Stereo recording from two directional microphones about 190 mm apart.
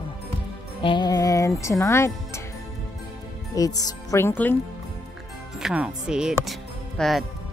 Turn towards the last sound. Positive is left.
turn(degrees=0)  # may be behind; listen again after turning